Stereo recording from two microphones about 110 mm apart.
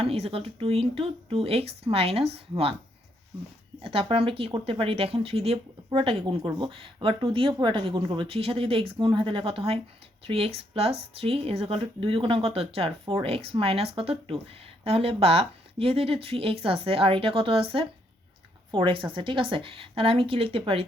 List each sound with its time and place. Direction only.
0.0 s speech: 60° right (ahead or behind)
3.8 s speech: 55° right (ahead or behind)